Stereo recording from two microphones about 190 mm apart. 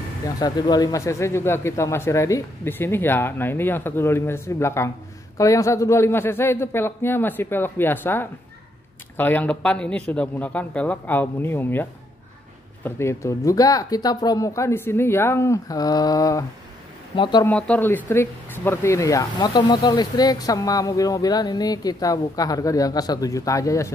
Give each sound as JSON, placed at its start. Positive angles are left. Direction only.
{"t": 0.4, "sound": "speech", "side_deg": 20}
{"t": 17.5, "sound": "speech", "side_deg": 5}